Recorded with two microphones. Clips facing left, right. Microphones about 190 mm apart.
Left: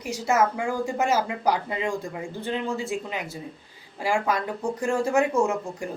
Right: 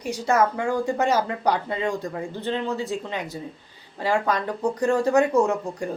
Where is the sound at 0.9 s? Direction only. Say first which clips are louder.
Even; 10° left (ahead or behind).